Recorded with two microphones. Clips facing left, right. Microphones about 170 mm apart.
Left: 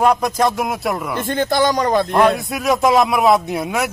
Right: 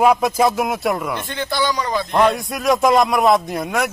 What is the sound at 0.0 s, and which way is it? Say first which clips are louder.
A man's voice: right 1 dB; 5° right (ahead or behind).